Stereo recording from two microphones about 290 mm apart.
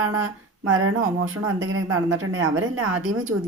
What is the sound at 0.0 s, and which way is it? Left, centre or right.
Speech, right.